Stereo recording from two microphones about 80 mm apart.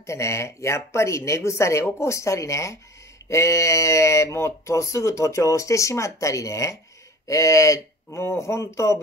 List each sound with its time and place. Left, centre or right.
0.0 s speech: left